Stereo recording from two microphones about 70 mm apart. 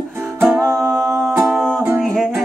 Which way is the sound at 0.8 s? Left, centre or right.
Centre.